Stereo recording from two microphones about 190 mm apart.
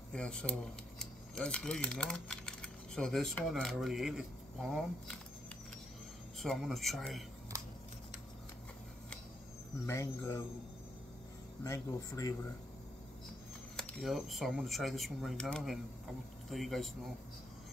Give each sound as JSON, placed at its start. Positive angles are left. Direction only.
{"t": 0.1, "sound": "speech", "side_deg": 5}
{"t": 6.4, "sound": "speech", "side_deg": 0}
{"t": 9.8, "sound": "speech", "side_deg": 15}
{"t": 11.6, "sound": "speech", "side_deg": 15}
{"t": 13.7, "sound": "speech", "side_deg": 0}